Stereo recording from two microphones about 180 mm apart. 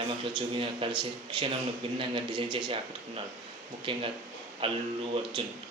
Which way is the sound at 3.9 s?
30° right (ahead or behind).